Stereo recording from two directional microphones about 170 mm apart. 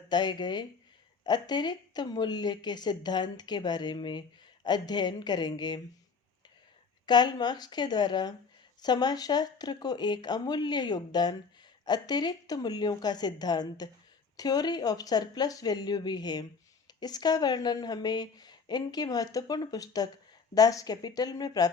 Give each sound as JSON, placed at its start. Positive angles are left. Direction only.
{"t": 0.1, "sound": "speech", "side_deg": 25}
{"t": 7.0, "sound": "speech", "side_deg": 25}